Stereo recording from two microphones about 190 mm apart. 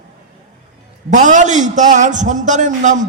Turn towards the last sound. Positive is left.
turn(degrees=-40)  # may be behind; listen again after turning